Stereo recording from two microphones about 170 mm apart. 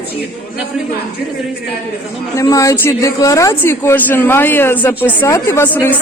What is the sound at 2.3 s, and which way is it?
Speech, 20° left (ahead or behind).